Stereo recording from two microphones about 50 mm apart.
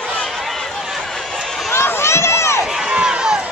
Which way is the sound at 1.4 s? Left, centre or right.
Centre.